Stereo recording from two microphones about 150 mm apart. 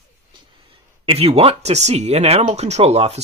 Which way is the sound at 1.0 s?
40° right (ahead or behind).